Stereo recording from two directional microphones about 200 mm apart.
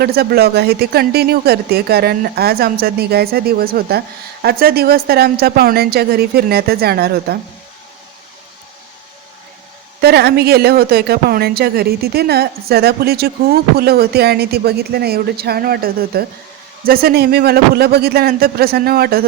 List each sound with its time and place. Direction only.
0.0 s speech: 50° right (ahead or behind)
10.0 s speech: 55° right (ahead or behind)